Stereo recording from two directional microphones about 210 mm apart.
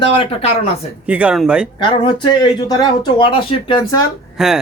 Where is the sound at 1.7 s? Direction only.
25° left (ahead or behind).